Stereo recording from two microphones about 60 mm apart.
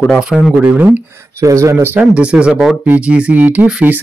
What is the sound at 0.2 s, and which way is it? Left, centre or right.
Speech, centre.